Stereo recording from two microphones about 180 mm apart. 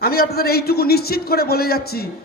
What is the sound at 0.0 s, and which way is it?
A man's voice, 60° left (ahead or behind).